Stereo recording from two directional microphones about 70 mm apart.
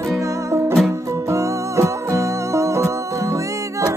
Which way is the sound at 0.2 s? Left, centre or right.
Right.